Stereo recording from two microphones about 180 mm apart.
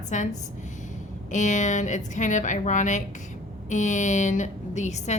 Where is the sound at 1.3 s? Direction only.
45° left (ahead or behind).